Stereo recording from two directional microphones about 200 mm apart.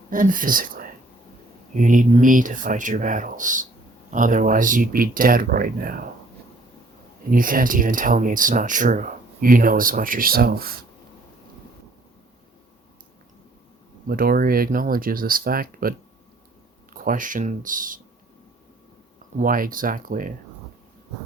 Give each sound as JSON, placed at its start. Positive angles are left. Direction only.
{"t": 0.1, "sound": "speech", "side_deg": -40}
{"t": 7.3, "sound": "speech", "side_deg": -45}
{"t": 14.1, "sound": "speech", "side_deg": -50}
{"t": 19.4, "sound": "speech", "side_deg": -45}